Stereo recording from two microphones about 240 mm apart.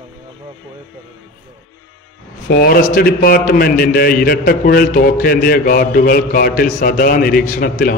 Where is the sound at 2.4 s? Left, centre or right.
Left.